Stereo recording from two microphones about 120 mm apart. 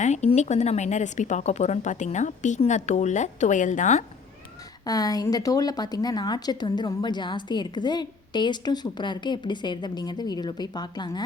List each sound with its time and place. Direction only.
0.0 s a woman's voice: 75° left (ahead or behind)
4.9 s a woman's voice: 30° left (ahead or behind)